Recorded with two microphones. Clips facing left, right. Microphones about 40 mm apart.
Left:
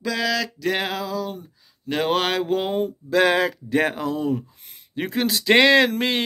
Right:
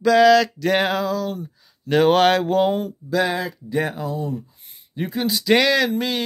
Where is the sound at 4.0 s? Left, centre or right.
Left.